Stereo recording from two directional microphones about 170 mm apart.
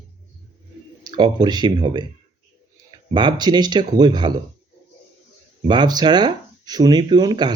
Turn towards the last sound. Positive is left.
turn(degrees=-25)  # may be behind; listen again after turning